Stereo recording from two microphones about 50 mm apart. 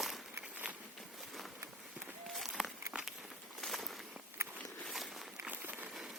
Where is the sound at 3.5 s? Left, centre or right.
Centre.